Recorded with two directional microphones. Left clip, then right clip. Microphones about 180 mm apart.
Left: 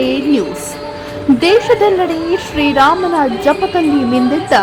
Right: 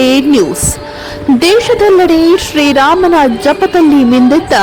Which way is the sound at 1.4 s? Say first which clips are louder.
Right 3 dB; 30° right (ahead or behind).